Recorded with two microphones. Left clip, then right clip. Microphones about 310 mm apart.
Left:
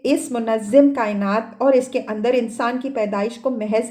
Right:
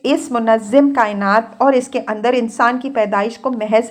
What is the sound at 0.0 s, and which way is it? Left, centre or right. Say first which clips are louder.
Speech: right 4 dB; right.